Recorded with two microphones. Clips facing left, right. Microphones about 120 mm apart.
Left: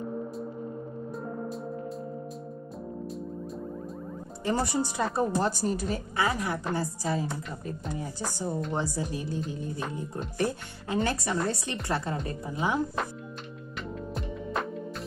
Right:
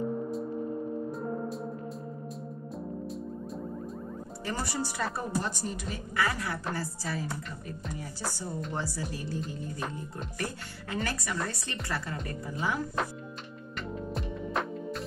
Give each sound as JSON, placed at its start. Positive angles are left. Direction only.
{"t": 4.5, "sound": "speech", "side_deg": 20}
{"t": 5.4, "sound": "speech", "side_deg": 35}
{"t": 6.1, "sound": "speech", "side_deg": 20}
{"t": 13.7, "sound": "music", "side_deg": 0}